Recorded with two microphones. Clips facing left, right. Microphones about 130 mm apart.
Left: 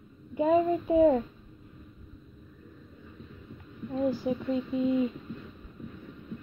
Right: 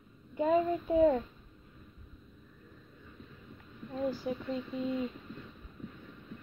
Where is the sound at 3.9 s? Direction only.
10° left (ahead or behind).